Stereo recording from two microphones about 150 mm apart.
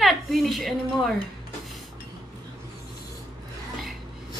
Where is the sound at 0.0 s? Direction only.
Centre (ahead or behind).